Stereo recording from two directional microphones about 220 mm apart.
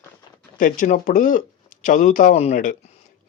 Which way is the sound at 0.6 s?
35° left (ahead or behind).